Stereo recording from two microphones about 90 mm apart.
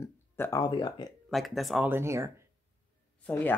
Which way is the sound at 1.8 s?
30° right (ahead or behind).